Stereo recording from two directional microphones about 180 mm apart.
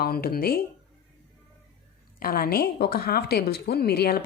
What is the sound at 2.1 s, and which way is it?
A woman's voice, 55° left (ahead or behind).